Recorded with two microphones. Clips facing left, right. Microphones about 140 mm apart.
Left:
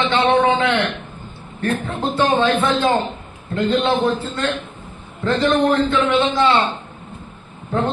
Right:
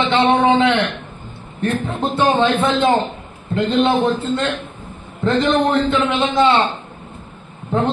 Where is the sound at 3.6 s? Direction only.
25° right (ahead or behind).